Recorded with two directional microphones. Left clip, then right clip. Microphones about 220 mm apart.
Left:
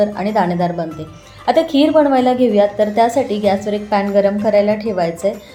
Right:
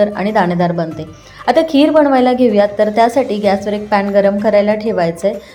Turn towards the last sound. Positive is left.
turn(degrees=-15)  # may be behind; listen again after turning